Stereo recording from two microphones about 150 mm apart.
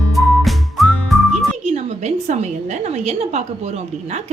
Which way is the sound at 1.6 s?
45° right (ahead or behind).